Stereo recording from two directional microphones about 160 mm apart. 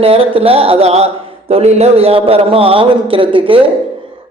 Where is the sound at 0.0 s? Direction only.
35° right (ahead or behind).